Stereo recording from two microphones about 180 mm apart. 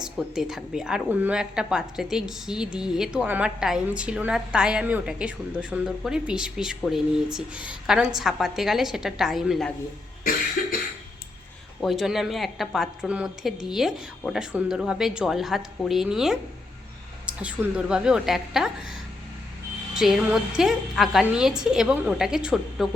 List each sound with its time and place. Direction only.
0.0 s a woman's voice: 5° right (ahead or behind)
10.6 s cough: 55° left (ahead or behind)
11.8 s a woman's voice: centre (ahead or behind)
20.0 s a woman's voice: 5° right (ahead or behind)